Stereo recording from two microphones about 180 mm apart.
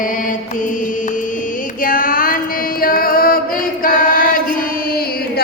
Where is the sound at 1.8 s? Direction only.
50° left (ahead or behind).